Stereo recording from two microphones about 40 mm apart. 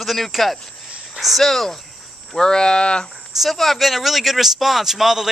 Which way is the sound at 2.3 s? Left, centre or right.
Centre.